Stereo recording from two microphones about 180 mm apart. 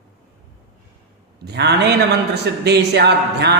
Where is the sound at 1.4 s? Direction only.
65° right (ahead or behind).